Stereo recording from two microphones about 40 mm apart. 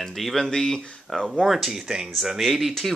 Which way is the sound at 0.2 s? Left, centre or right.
Centre.